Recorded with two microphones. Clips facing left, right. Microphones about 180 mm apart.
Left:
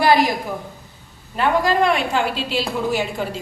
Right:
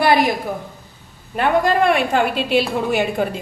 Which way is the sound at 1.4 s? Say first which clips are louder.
Right 1 dB; 55° right (ahead or behind).